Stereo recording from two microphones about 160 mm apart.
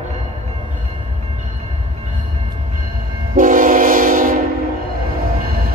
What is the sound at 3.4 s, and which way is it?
Train, 55° right (ahead or behind).